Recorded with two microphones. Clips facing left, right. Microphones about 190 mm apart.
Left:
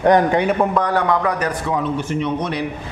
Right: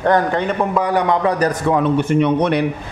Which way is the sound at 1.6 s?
60° right (ahead or behind).